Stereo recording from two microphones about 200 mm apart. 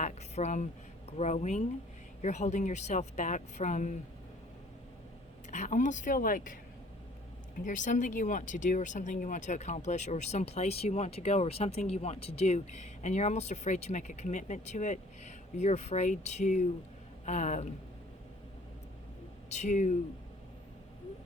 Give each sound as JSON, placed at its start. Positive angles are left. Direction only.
{"t": 0.0, "sound": "a sound", "side_deg": 35}
{"t": 1.1, "sound": "speech", "side_deg": 35}
{"t": 5.5, "sound": "speech", "side_deg": 40}
{"t": 7.6, "sound": "speech", "side_deg": 40}
{"t": 19.5, "sound": "speech", "side_deg": 35}